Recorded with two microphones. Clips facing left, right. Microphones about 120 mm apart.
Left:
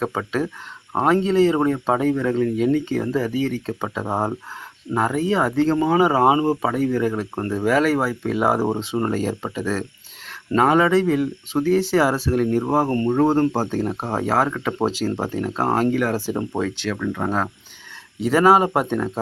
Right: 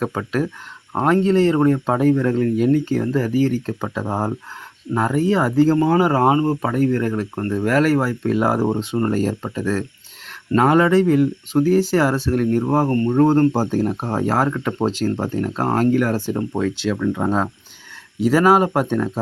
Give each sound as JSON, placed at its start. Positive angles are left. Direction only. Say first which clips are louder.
{"t": 0.0, "sound": "speech", "louder": "right 1 dB", "side_deg": 0}
{"t": 4.9, "sound": "speech", "louder": "right 2 dB", "side_deg": 0}
{"t": 12.9, "sound": "speech", "louder": "right 1 dB", "side_deg": 15}
{"t": 13.1, "sound": "speech", "louder": "right 4 dB", "side_deg": 5}
{"t": 13.5, "sound": "speech", "louder": "right 3 dB", "side_deg": -5}
{"t": 16.3, "sound": "speech", "louder": "right 2 dB", "side_deg": 15}
{"t": 16.7, "sound": "speech", "louder": "right 4 dB", "side_deg": -10}